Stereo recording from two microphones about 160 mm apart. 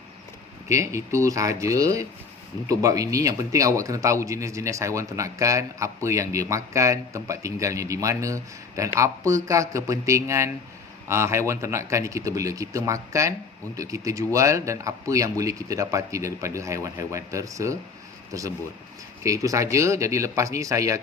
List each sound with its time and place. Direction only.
0.7 s speech: 20° right (ahead or behind)
19.2 s speech: 20° right (ahead or behind)